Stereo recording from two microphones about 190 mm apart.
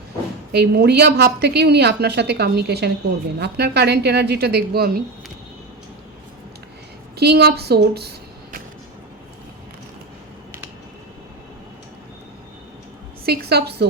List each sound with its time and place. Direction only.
0.5 s a woman's voice: 60° right (ahead or behind)
7.2 s a woman's voice: 60° right (ahead or behind)
13.2 s a woman's voice: 55° right (ahead or behind)